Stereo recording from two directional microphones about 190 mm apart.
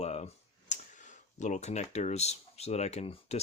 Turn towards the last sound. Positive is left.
turn(degrees=30)  # may be behind; listen again after turning